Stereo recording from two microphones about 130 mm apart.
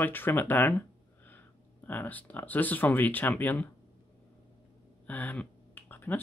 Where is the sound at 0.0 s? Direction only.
15° left (ahead or behind).